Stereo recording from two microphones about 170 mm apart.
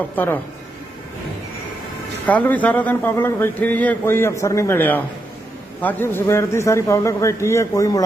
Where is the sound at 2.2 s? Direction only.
10° left (ahead or behind).